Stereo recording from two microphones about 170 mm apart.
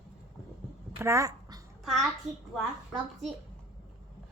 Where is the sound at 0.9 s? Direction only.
15° right (ahead or behind).